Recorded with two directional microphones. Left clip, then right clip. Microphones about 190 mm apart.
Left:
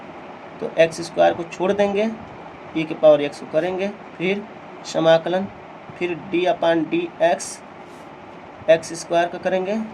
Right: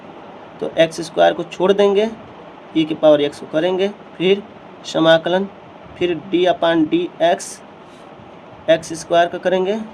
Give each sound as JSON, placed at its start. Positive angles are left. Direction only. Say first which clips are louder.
{"t": 0.8, "sound": "speech", "louder": "right 2 dB", "side_deg": -30}
{"t": 8.6, "sound": "speech", "louder": "right 1 dB", "side_deg": -25}